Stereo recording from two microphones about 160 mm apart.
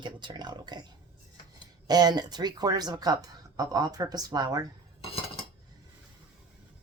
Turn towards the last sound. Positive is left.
turn(degrees=35)  # may be behind; listen again after turning